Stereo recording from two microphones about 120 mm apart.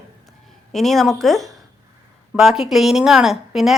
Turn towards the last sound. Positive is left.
turn(degrees=0)  # may be behind; listen again after turning